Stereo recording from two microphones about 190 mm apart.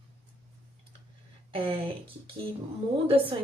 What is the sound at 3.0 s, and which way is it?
Speech, 30° right (ahead or behind).